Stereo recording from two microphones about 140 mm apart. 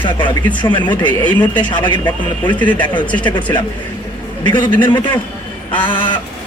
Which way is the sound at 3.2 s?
35° left (ahead or behind).